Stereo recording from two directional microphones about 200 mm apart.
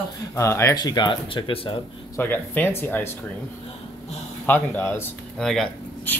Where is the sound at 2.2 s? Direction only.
10° left (ahead or behind).